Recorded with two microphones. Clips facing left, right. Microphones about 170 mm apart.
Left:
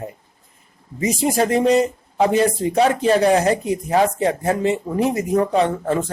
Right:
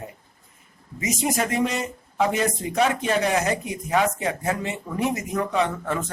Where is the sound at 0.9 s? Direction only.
35° left (ahead or behind).